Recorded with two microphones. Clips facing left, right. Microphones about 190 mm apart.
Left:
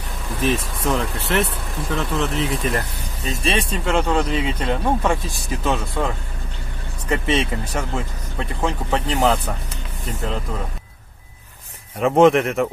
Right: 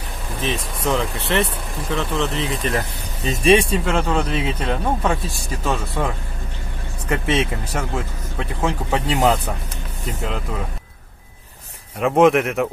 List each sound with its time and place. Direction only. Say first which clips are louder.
0.4 s speech: left 3 dB; 5° left (ahead or behind)
3.3 s speech: right 7 dB; 15° right (ahead or behind)
12.0 s speech: left 1 dB; centre (ahead or behind)